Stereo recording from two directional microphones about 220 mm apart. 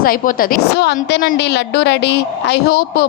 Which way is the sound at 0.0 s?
40° left (ahead or behind).